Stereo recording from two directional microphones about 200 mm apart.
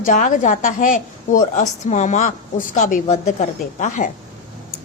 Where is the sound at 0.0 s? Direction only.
40° left (ahead or behind).